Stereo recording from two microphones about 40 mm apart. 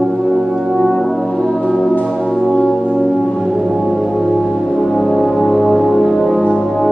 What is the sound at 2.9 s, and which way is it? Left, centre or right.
Music, centre.